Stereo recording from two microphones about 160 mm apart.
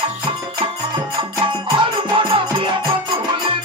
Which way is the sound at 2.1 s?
30° right (ahead or behind).